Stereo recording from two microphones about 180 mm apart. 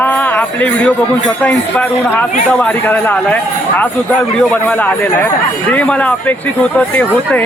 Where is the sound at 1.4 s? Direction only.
10° left (ahead or behind).